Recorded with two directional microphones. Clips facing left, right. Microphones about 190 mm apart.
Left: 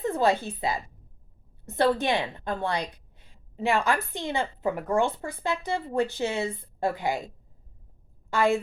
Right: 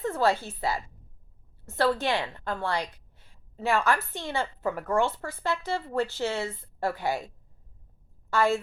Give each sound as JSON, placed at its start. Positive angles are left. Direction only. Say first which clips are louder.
{"t": 0.0, "sound": "a woman's voice", "louder": "left 2 dB", "side_deg": 15}
{"t": 8.3, "sound": "a woman's voice", "louder": "left 1 dB", "side_deg": 15}